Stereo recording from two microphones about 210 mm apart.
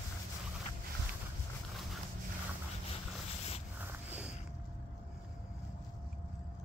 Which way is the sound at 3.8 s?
5° right (ahead or behind).